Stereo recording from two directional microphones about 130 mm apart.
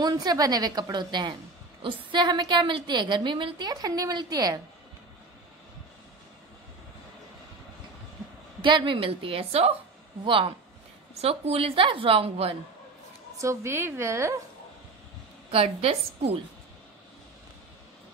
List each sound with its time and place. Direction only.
0.0 s a woman's voice: 30° right (ahead or behind)
8.6 s a woman's voice: 40° right (ahead or behind)
11.1 s a woman's voice: 50° right (ahead or behind)
13.4 s a woman's voice: 20° right (ahead or behind)
15.5 s a woman's voice: 50° right (ahead or behind)